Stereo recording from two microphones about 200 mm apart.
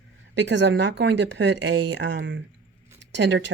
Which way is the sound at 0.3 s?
65° right (ahead or behind).